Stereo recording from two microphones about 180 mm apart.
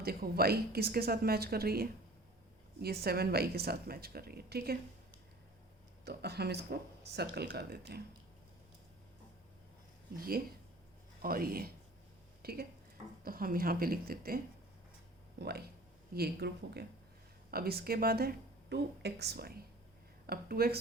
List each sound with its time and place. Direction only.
0.0 s a woman's voice: 55° right (ahead or behind)
6.1 s a woman's voice: 65° right (ahead or behind)
10.2 s a woman's voice: 55° right (ahead or behind)
12.4 s a sound: 60° right (ahead or behind)
13.2 s a woman's voice: 55° right (ahead or behind)